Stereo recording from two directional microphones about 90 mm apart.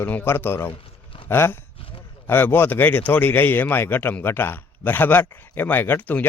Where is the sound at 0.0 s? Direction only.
25° left (ahead or behind).